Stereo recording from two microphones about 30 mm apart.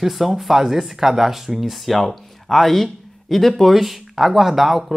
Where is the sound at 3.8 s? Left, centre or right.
Centre.